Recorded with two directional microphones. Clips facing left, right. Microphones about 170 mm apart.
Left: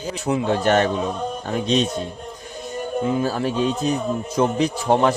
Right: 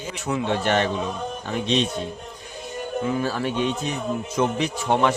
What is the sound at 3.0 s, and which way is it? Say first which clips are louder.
A man's voice: left 3 dB; 40° left (ahead or behind).